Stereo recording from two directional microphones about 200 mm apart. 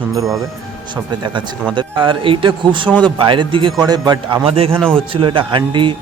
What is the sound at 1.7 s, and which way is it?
Speech, 25° right (ahead or behind).